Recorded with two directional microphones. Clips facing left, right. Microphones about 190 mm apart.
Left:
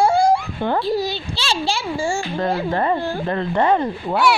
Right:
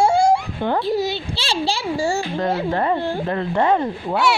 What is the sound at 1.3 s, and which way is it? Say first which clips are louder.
Speech: even; 30° right (ahead or behind).